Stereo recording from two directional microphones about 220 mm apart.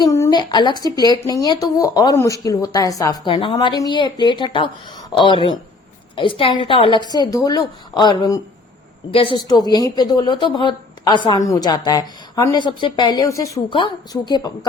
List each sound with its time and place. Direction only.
0.0 s speech: 15° left (ahead or behind)